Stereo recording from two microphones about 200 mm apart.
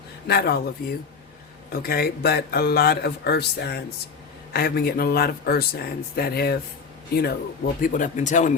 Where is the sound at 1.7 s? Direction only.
50° left (ahead or behind).